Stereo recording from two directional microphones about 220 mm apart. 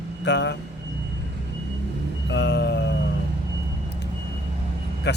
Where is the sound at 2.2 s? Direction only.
50° left (ahead or behind).